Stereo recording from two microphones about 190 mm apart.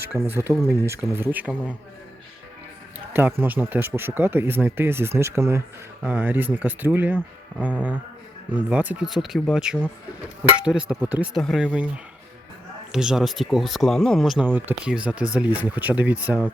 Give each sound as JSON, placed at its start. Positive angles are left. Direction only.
{"t": 0.0, "sound": "speech", "side_deg": -10}
{"t": 3.1, "sound": "speech", "side_deg": -10}
{"t": 12.9, "sound": "speech", "side_deg": -5}
{"t": 14.4, "sound": "speech", "side_deg": -10}